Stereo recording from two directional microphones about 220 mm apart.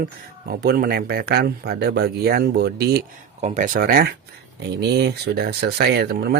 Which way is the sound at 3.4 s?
35° right (ahead or behind).